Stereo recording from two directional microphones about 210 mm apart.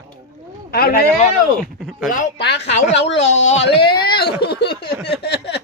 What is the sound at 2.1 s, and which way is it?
Speech, 40° left (ahead or behind).